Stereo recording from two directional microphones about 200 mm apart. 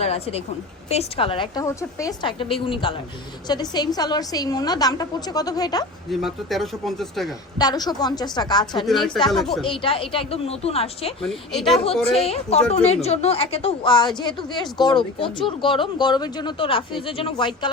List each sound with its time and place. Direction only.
0.0 s a woman's voice: 30° left (ahead or behind)
6.1 s speech: centre (ahead or behind)
7.6 s a woman's voice: 20° left (ahead or behind)
8.8 s speech: centre (ahead or behind)
9.6 s a woman's voice: 25° left (ahead or behind)
11.2 s speech: centre (ahead or behind)
12.2 s a woman's voice: 30° left (ahead or behind)